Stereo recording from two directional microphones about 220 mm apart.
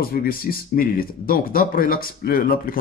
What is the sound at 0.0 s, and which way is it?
Speech, 40° left (ahead or behind).